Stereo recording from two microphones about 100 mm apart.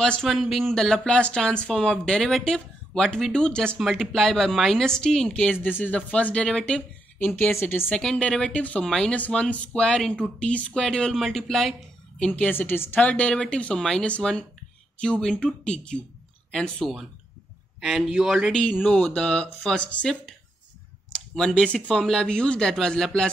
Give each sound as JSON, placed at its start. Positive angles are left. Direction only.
{"t": 0.0, "sound": "speech", "side_deg": 5}
{"t": 7.9, "sound": "speech", "side_deg": 5}
{"t": 12.4, "sound": "speech", "side_deg": 20}
{"t": 18.5, "sound": "speech", "side_deg": 10}